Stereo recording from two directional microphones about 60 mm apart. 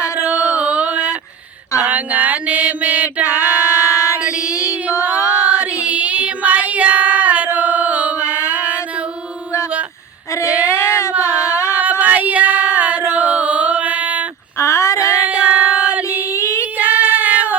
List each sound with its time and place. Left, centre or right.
0.3 s a sound: right
3.2 s female singing: left
4.2 s female singing: centre
5.0 s singing: right
5.5 s child singing: right
10.4 s child singing: right
10.8 s a sound: left
11.7 s female singing: right
13.1 s music: right
14.6 s child singing: left
15.0 s child singing: right
16.3 s female singing: left
16.7 s female singing: right